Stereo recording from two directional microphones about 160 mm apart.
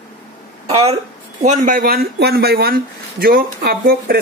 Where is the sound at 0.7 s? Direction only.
40° right (ahead or behind).